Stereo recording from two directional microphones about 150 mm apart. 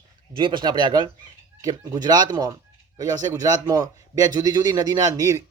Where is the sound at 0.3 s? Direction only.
30° right (ahead or behind).